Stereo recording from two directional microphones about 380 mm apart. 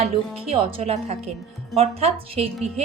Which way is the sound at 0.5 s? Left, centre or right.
Centre.